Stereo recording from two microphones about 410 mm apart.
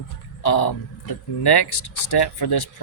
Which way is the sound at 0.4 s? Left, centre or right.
Left.